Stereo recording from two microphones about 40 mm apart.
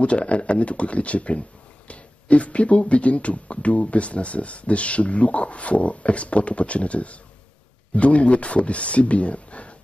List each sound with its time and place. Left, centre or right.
0.0 s speech: left